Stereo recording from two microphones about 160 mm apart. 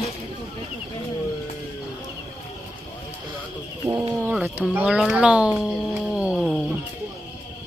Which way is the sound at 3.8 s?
20° right (ahead or behind).